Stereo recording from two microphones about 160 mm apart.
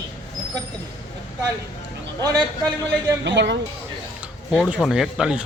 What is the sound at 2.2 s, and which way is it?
Speech, 25° right (ahead or behind).